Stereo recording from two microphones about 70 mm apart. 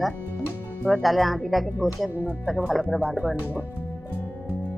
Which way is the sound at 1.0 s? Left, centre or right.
Centre.